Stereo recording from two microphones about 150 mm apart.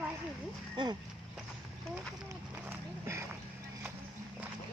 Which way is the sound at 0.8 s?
30° right (ahead or behind).